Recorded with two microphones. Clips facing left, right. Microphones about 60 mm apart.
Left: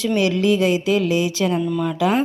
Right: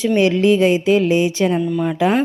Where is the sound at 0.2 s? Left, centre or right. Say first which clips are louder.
Right 4 dB; right.